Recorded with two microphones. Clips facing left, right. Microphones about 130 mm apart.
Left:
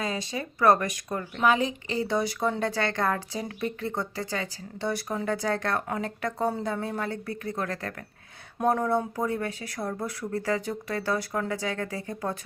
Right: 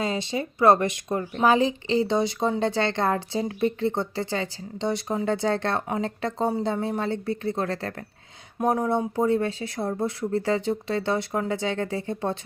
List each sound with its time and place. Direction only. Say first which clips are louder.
0.0 s speech: right 4 dB; 25° right (ahead or behind)
8.6 s speech: right 1 dB; 15° right (ahead or behind)